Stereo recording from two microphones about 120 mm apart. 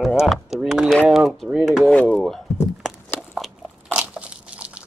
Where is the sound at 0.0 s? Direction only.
5° right (ahead or behind).